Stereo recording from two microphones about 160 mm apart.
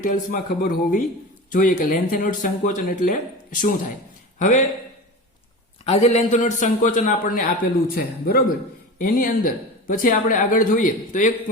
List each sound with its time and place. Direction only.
0.0 s a man's voice: 55° left (ahead or behind)
5.8 s a man's voice: 40° left (ahead or behind); by 8.4 s 70° left (ahead or behind)
9.0 s speech: 60° left (ahead or behind)